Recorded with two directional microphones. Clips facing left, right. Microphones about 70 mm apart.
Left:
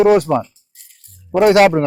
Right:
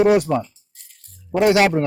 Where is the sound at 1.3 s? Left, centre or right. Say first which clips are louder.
Left 5 dB; left.